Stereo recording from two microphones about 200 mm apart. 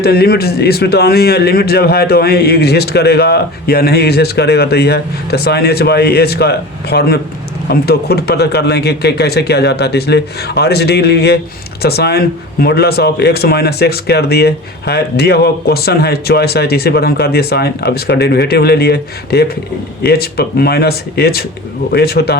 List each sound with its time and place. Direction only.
0.0 s a man's voice: 50° left (ahead or behind)